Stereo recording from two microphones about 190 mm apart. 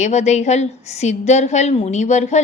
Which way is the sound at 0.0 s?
35° left (ahead or behind).